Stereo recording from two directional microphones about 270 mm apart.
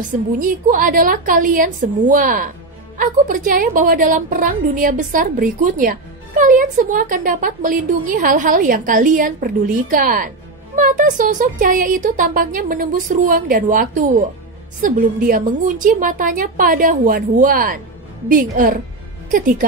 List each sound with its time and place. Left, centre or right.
0.4 s a woman's voice: right